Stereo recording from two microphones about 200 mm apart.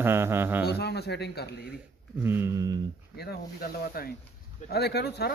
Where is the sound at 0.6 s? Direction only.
55° left (ahead or behind).